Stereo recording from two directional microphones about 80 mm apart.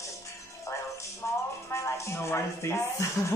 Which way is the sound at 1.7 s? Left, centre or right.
Left.